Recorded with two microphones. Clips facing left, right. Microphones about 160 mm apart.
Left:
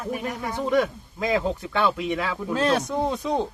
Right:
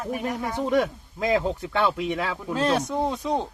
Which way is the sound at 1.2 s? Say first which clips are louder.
Right 1 dB; 30° right (ahead or behind).